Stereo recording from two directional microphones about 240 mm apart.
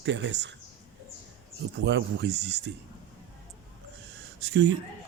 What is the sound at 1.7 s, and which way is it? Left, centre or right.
Speech, right.